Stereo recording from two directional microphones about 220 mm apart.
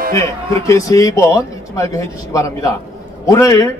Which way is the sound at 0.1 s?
15° left (ahead or behind).